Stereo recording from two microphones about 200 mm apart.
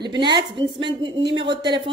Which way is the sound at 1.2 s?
65° right (ahead or behind).